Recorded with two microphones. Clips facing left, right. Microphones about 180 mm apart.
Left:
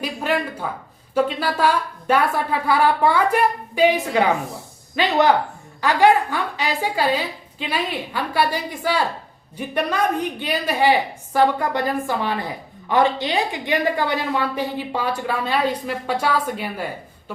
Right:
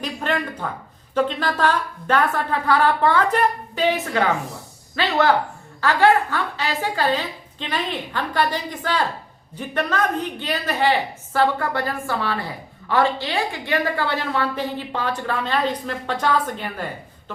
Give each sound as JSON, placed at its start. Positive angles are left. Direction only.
{"t": 0.0, "sound": "a woman's voice", "side_deg": 10}